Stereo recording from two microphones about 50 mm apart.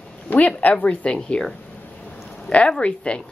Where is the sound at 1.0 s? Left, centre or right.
Left.